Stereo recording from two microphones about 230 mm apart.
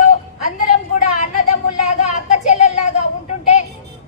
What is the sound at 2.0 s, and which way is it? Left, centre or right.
Child singing, left.